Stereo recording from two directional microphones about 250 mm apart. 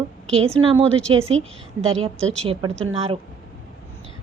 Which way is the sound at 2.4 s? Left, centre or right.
Right.